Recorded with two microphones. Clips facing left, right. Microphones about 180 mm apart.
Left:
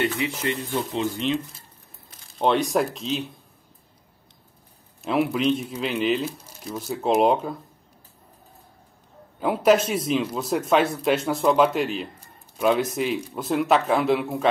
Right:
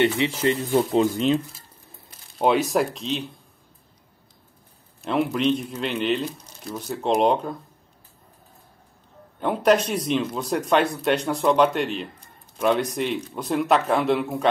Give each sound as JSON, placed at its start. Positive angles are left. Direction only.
{"t": 0.0, "sound": "speech", "side_deg": -30}
{"t": 2.3, "sound": "speech", "side_deg": -5}
{"t": 5.0, "sound": "speech", "side_deg": 5}
{"t": 9.4, "sound": "speech", "side_deg": 5}